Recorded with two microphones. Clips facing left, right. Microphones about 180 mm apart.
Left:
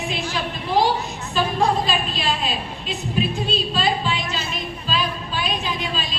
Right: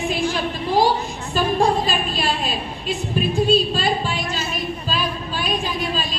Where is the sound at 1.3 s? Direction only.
45° right (ahead or behind).